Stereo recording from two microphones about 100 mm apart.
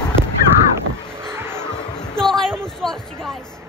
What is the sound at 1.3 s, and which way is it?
Music, 25° right (ahead or behind).